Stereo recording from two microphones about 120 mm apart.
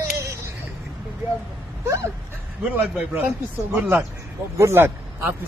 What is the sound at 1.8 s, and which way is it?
A man's voice, 25° right (ahead or behind).